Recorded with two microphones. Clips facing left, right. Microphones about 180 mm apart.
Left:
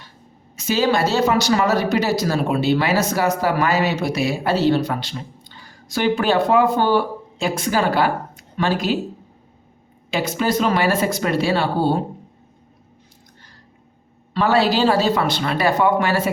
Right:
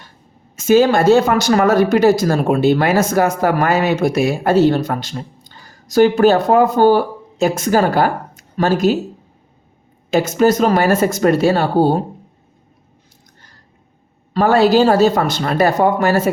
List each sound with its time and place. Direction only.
0.5 s speech: 50° right (ahead or behind)
10.1 s speech: 45° right (ahead or behind)
14.3 s speech: 45° right (ahead or behind)